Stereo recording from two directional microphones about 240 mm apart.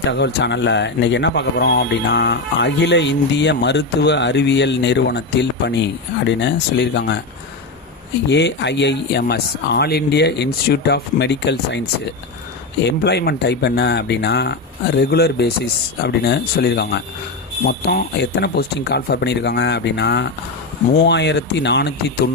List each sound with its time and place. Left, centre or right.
0.1 s speech: left
8.3 s speech: left
12.8 s speech: left